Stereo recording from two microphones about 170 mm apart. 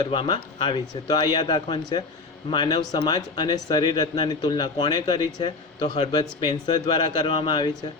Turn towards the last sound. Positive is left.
turn(degrees=25)  # may be behind; listen again after turning